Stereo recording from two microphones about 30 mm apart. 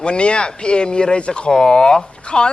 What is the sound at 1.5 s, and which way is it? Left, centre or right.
Speech, left.